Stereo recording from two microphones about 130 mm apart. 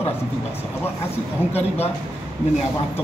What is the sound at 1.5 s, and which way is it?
Speech, 50° left (ahead or behind).